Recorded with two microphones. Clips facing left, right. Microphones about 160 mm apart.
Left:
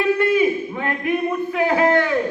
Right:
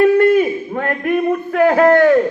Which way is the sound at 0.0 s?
50° right (ahead or behind).